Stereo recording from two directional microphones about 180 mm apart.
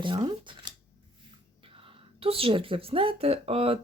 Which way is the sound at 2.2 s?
30° right (ahead or behind).